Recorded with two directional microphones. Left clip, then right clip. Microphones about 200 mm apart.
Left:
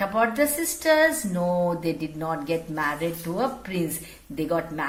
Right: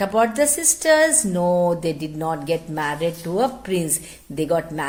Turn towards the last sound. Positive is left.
turn(degrees=-50)  # may be behind; listen again after turning